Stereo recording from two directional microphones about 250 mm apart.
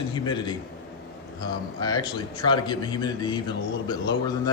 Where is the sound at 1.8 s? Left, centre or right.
Centre.